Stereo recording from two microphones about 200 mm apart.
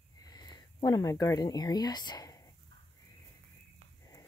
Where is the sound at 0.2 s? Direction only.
20° left (ahead or behind).